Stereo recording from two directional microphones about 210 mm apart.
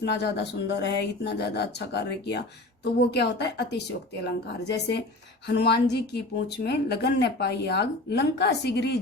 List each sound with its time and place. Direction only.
0.0 s speech: 55° left (ahead or behind)